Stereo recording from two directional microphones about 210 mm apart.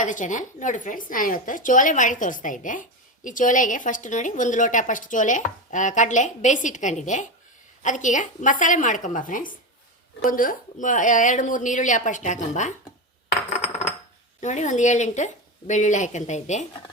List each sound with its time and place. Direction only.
0.0 s a woman's voice: 35° left (ahead or behind)
13.6 s coin: 30° left (ahead or behind)
14.4 s a woman's voice: 35° left (ahead or behind)